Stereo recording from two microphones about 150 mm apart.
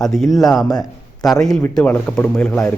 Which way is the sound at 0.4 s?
25° left (ahead or behind).